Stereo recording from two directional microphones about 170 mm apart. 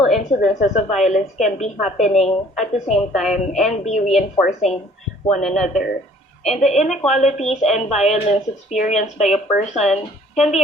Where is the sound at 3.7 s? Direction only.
40° left (ahead or behind).